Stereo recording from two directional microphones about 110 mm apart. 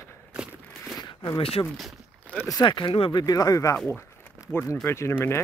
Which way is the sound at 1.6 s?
35° left (ahead or behind).